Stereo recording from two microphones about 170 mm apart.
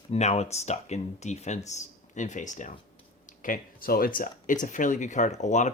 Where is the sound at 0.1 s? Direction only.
40° left (ahead or behind).